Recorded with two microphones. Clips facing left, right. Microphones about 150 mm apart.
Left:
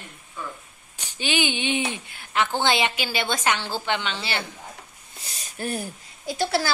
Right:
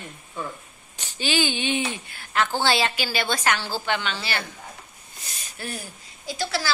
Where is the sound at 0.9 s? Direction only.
15° left (ahead or behind).